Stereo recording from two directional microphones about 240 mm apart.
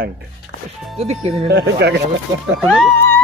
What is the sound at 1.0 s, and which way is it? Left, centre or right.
Speech, right.